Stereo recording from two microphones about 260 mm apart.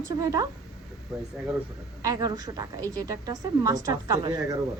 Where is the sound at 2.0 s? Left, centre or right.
Centre.